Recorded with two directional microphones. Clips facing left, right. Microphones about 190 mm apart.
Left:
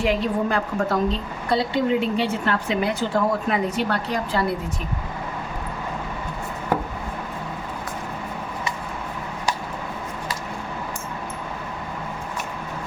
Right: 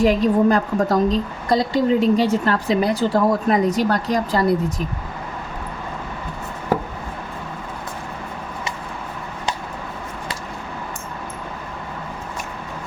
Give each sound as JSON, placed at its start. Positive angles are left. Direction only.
{"t": 0.0, "sound": "a woman's voice", "side_deg": -40}